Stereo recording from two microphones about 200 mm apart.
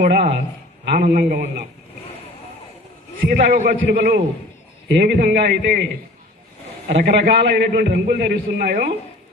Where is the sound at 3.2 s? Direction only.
45° right (ahead or behind).